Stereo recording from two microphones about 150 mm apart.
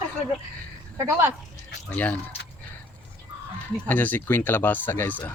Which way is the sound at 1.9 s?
10° left (ahead or behind).